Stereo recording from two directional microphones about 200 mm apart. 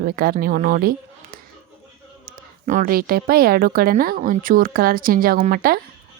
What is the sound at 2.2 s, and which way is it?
Speech, 40° right (ahead or behind).